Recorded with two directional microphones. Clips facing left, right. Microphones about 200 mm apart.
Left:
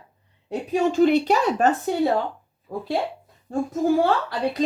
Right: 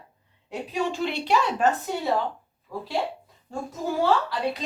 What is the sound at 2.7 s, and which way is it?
Speech, 50° left (ahead or behind).